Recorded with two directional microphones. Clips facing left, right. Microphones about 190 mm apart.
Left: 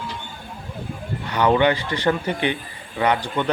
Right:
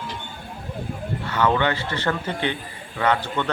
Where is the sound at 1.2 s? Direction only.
15° left (ahead or behind).